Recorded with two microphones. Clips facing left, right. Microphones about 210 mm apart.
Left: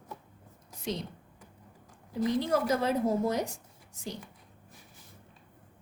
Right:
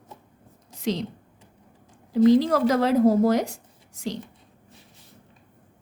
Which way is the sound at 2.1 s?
90° right.